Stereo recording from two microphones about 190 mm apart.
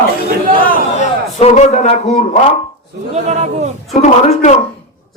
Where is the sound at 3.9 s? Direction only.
35° left (ahead or behind).